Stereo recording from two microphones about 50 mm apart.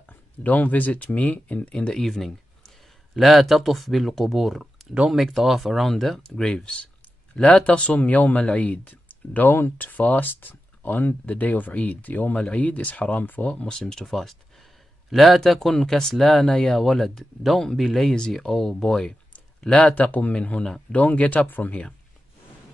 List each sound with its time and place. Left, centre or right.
0.4 s speech: left
2.0 s speech: centre
6.2 s speech: centre; by 13.7 s left
13.7 s speech: centre
19.6 s speech: left
20.3 s speech: left